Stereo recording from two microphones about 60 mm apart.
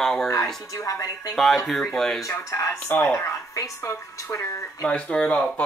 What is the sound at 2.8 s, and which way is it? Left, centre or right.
Speech, left.